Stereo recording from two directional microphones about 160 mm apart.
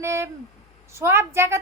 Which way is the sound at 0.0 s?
15° right (ahead or behind).